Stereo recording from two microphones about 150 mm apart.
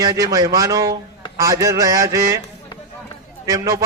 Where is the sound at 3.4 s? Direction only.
20° right (ahead or behind).